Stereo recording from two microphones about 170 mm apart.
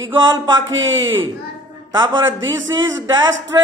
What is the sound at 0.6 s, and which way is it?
Speech, 90° right.